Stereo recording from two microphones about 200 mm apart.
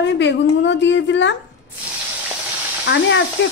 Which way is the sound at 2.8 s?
60° left (ahead or behind).